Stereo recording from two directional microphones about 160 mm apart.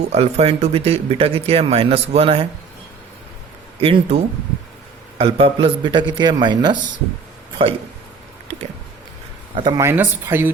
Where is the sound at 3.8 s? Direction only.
35° right (ahead or behind).